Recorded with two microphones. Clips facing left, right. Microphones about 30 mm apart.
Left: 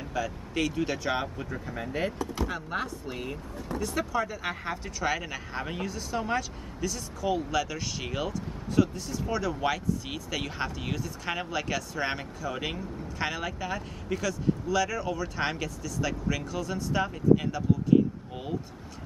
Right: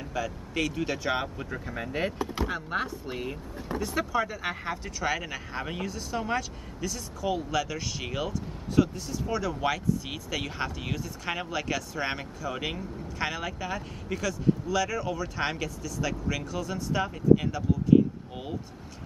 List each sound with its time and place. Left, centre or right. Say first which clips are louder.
0.1 s speech: left 1 dB; centre
2.1 s speech: right 1 dB; right
2.4 s speech: right 2 dB; centre
3.5 s speech: right 1 dB; centre